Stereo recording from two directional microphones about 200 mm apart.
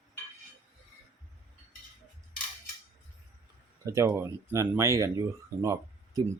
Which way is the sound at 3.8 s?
15° right (ahead or behind).